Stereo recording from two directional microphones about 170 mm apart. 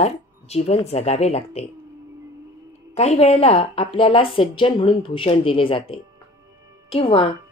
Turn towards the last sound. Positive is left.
turn(degrees=35)  # may be behind; listen again after turning